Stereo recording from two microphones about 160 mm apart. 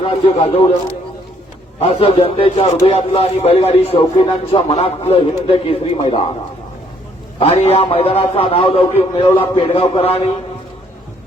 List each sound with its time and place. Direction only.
0.0 s a man's voice: 35° left (ahead or behind)
1.8 s a man's voice: 35° left (ahead or behind)
7.3 s a man's voice: 40° left (ahead or behind)